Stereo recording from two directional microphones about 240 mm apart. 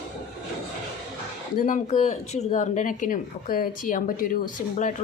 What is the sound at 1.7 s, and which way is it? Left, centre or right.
Speech, left.